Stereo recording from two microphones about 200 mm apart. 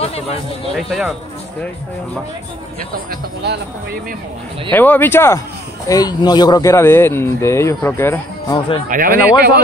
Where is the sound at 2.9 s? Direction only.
50° right (ahead or behind).